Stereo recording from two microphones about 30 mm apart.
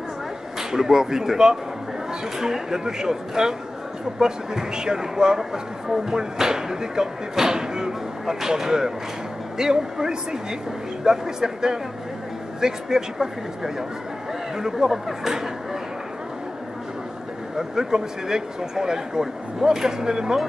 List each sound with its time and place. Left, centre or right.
0.6 s speech: centre
17.6 s speech: right